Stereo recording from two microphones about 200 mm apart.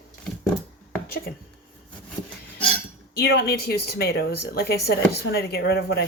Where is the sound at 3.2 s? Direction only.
50° left (ahead or behind).